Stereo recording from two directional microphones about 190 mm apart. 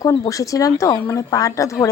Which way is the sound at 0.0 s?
15° left (ahead or behind).